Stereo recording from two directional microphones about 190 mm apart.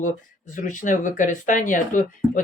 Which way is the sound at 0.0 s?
40° left (ahead or behind).